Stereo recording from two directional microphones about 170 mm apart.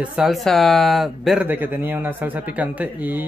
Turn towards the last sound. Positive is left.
turn(degrees=-10)  # may be behind; listen again after turning